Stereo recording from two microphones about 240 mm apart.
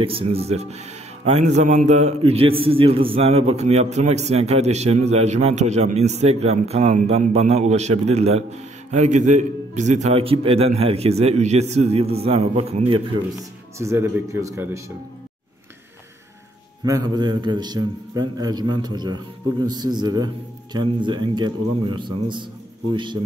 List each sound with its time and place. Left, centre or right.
0.0 s speech: right
13.7 s a man's voice: centre
16.8 s a man's voice: centre